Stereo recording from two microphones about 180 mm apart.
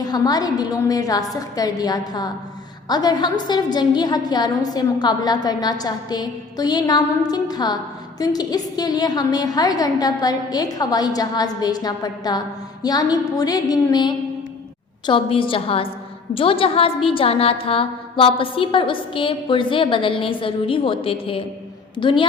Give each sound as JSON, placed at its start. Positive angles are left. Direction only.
{"t": 0.0, "sound": "a woman's voice", "side_deg": 20}